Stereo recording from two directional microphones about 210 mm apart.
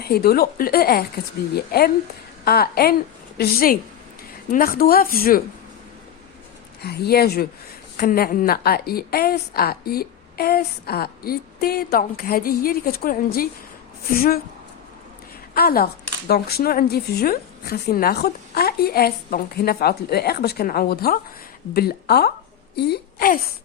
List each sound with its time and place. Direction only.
0.0 s speech: 45° left (ahead or behind)
6.8 s speech: 50° left (ahead or behind)
15.5 s speech: 45° left (ahead or behind)